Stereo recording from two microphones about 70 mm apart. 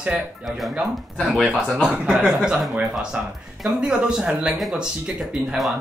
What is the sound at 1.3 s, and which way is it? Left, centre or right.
Speech, centre.